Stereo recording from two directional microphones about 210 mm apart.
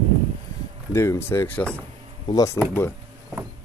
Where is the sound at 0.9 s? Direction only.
15° left (ahead or behind).